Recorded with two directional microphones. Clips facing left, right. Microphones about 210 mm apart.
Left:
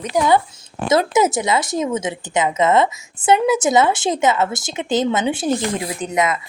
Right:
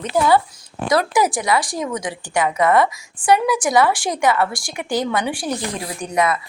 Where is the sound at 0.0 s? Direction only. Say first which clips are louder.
Even; 15° left (ahead or behind).